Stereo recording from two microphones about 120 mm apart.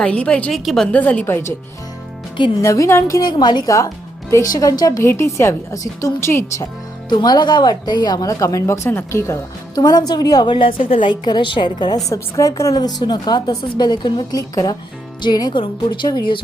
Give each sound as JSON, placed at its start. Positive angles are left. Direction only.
{"t": 0.0, "sound": "a woman's voice", "side_deg": 10}
{"t": 2.6, "sound": "a woman's voice", "side_deg": 25}
{"t": 7.1, "sound": "a woman's voice", "side_deg": 35}